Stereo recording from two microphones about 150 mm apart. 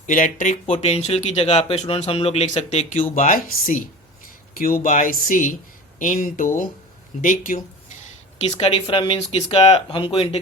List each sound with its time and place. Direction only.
0.0 s speech: 60° left (ahead or behind); by 2.5 s 40° left (ahead or behind)
2.6 s speech: 55° left (ahead or behind)
8.4 s speech: 35° left (ahead or behind)